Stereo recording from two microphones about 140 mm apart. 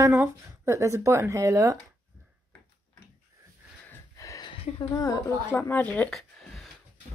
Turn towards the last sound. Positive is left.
turn(degrees=0)  # may be behind; listen again after turning